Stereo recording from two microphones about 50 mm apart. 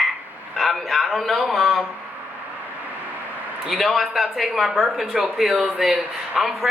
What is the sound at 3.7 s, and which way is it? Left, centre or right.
Speech, centre.